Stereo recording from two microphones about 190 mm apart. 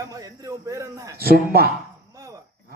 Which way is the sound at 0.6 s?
15° right (ahead or behind).